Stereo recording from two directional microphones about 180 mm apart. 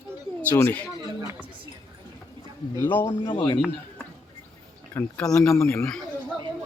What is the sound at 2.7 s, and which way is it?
Speech, 10° left (ahead or behind).